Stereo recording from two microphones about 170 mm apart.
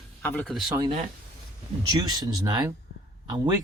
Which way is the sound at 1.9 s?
25° right (ahead or behind).